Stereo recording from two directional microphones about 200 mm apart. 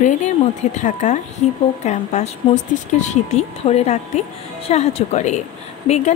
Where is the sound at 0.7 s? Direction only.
35° left (ahead or behind).